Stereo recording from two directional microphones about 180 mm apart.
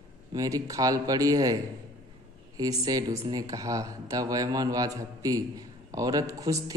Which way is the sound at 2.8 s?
20° right (ahead or behind).